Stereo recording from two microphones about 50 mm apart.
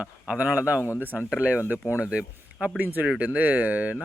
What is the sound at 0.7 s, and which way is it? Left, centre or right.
Speech, left.